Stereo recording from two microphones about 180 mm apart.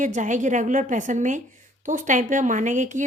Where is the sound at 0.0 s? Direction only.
45° right (ahead or behind).